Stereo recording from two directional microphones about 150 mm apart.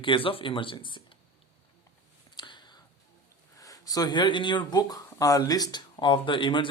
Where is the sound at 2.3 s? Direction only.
30° left (ahead or behind).